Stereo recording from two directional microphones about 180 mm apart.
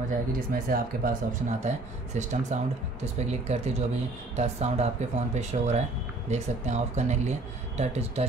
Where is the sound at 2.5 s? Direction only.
40° right (ahead or behind).